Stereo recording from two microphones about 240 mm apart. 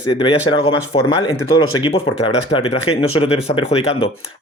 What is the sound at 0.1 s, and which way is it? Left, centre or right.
Speech, left.